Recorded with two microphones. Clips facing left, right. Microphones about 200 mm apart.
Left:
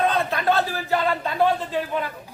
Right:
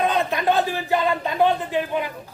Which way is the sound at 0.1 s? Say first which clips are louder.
Right 1 dB; 15° right (ahead or behind).